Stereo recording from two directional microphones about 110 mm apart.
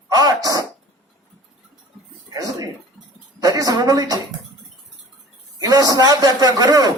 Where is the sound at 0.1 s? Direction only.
35° right (ahead or behind).